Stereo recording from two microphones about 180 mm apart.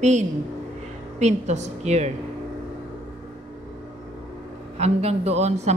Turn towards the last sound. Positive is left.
turn(degrees=-40)  # may be behind; listen again after turning